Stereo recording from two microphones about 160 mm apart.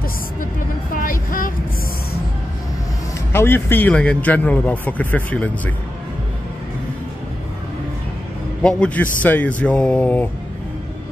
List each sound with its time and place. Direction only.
1.0 s speech: 60° left (ahead or behind)
3.3 s a man's voice: 15° left (ahead or behind)
8.6 s a man's voice: 5° left (ahead or behind)